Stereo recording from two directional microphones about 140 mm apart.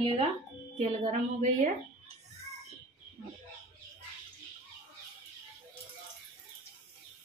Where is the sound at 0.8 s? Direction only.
50° right (ahead or behind).